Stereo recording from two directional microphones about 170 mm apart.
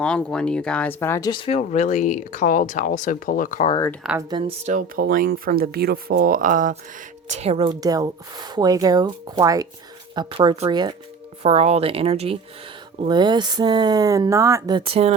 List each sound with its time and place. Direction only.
0.0 s speech: 5° left (ahead or behind)
1.3 s speech: 30° left (ahead or behind); by 3.7 s 50° left (ahead or behind)
4.3 s speech: 30° right (ahead or behind)
4.9 s speech: 65° right (ahead or behind)
7.3 s speech: 40° right (ahead or behind)
11.4 s speech: 40° right (ahead or behind)
13.1 s speech: 25° right (ahead or behind)